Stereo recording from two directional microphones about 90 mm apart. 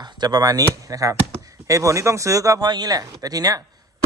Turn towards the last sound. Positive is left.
turn(degrees=-45)  # may be behind; listen again after turning